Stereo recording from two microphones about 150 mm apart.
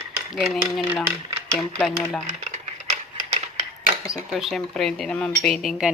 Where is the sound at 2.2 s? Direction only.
50° right (ahead or behind).